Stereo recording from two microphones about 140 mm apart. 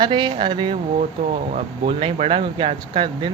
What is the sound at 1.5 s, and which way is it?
Speech, 45° right (ahead or behind).